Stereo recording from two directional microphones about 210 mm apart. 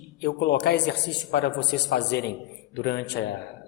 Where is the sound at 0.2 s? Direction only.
50° left (ahead or behind).